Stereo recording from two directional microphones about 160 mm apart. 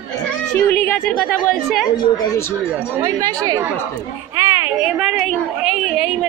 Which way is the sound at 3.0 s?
20° right (ahead or behind).